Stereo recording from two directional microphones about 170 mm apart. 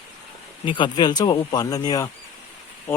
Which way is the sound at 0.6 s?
30° left (ahead or behind).